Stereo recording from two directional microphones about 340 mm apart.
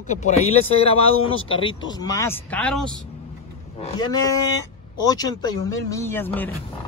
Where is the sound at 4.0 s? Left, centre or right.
Centre.